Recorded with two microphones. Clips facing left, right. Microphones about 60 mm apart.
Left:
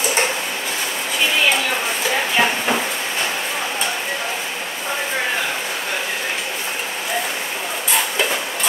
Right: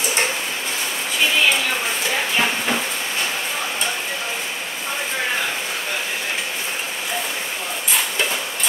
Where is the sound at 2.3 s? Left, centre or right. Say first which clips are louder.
Left 3 dB; centre.